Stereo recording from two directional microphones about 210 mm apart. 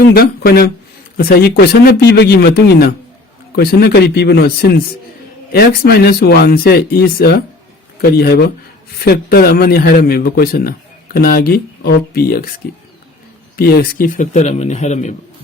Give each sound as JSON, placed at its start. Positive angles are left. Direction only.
{"t": 0.0, "sound": "a man's voice", "side_deg": 45}
{"t": 13.6, "sound": "speech", "side_deg": 45}